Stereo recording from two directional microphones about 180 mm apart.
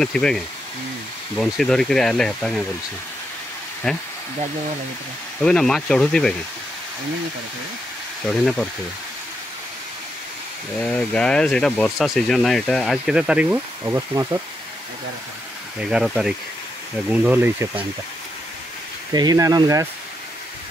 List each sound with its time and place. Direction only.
0.0 s speech: 5° left (ahead or behind)
3.9 s speech: centre (ahead or behind)
5.4 s speech: 5° left (ahead or behind)
8.3 s speech: 5° left (ahead or behind)
10.8 s speech: 5° left (ahead or behind); by 14.4 s 20° right (ahead or behind)
15.8 s speech: 5° right (ahead or behind)
19.1 s speech: 20° right (ahead or behind)